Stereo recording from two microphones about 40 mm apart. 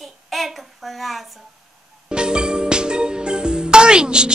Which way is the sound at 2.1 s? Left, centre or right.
Right.